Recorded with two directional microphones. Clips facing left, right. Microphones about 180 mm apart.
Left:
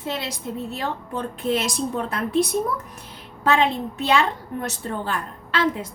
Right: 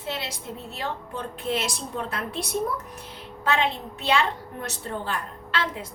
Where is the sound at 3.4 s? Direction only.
45° left (ahead or behind).